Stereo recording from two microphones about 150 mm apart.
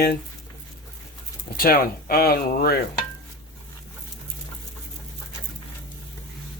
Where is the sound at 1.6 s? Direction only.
80° left.